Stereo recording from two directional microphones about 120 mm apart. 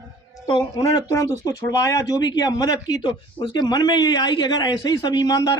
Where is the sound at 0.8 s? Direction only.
25° left (ahead or behind).